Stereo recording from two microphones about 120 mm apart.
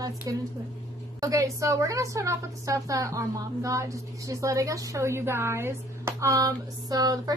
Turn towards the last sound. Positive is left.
turn(degrees=-30)  # may be behind; listen again after turning